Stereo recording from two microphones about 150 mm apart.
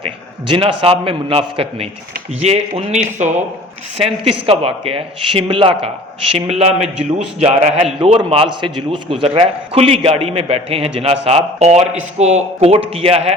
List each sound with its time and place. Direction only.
0.0 s a man's voice: 35° right (ahead or behind)